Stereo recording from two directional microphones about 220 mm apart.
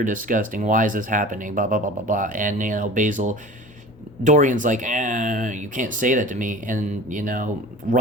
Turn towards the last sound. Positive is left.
turn(degrees=-40)  # may be behind; listen again after turning